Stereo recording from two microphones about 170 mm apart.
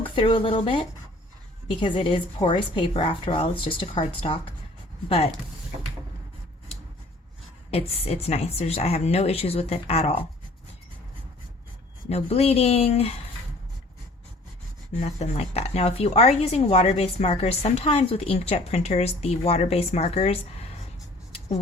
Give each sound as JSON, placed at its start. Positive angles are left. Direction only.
{"t": 0.2, "sound": "speech", "side_deg": 30}
{"t": 7.7, "sound": "speech", "side_deg": 35}
{"t": 12.0, "sound": "speech", "side_deg": 35}
{"t": 15.0, "sound": "speech", "side_deg": 40}